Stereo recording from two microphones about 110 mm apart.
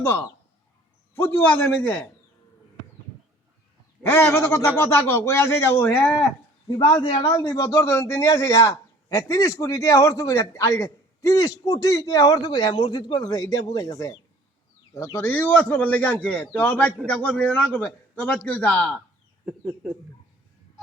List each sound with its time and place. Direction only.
0.0 s speech: 20° left (ahead or behind)
4.0 s speech: 20° left (ahead or behind)
6.7 s speech: 50° left (ahead or behind)
7.3 s a man's voice: 35° left (ahead or behind)
14.9 s a man's voice: 20° left (ahead or behind)
19.5 s speech: 10° right (ahead or behind)